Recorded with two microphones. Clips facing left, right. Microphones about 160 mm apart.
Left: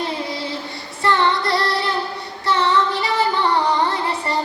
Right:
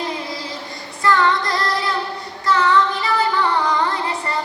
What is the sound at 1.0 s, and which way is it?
Female singing, 25° left (ahead or behind).